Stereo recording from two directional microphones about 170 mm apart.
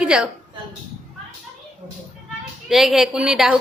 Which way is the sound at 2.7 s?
Centre (ahead or behind).